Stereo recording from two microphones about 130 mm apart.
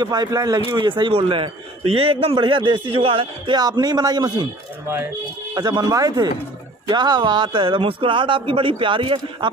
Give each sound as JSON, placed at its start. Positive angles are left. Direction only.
{"t": 0.0, "sound": "speech", "side_deg": -30}
{"t": 0.7, "sound": "a man's voice", "side_deg": -35}
{"t": 5.5, "sound": "a man's voice", "side_deg": -30}